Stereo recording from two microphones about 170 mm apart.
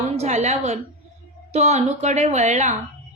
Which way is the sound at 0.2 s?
40° right (ahead or behind).